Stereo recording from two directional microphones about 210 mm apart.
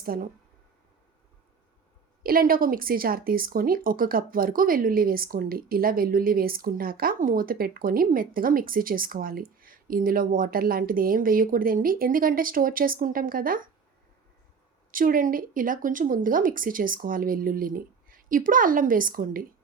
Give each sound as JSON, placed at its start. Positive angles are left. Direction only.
{"t": 0.0, "sound": "speech", "side_deg": -45}
{"t": 2.2, "sound": "speech", "side_deg": -45}
{"t": 14.9, "sound": "speech", "side_deg": -40}